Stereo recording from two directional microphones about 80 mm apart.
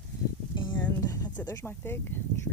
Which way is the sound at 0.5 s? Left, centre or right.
Left.